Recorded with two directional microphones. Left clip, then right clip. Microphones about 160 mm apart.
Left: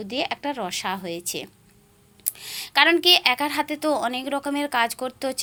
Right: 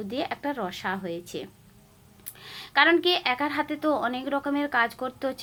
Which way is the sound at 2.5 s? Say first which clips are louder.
Left 2 dB; 20° left (ahead or behind).